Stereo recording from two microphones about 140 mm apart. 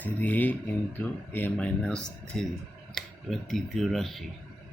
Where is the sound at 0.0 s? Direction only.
10° left (ahead or behind).